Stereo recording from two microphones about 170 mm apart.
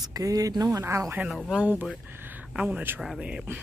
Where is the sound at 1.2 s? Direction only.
Centre (ahead or behind).